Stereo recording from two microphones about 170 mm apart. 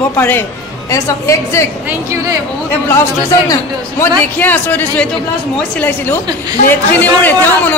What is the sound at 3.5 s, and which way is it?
Speech, 15° left (ahead or behind).